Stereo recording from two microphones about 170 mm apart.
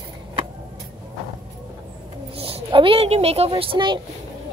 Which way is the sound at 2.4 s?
35° right (ahead or behind).